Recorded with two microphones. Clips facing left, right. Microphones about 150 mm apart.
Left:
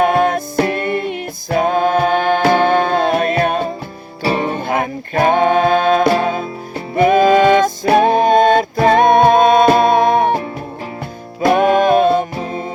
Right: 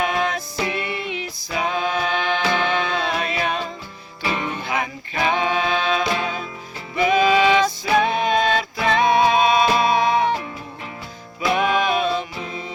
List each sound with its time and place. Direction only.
0.0 s music: 50° left (ahead or behind)
4.2 s music: 40° left (ahead or behind)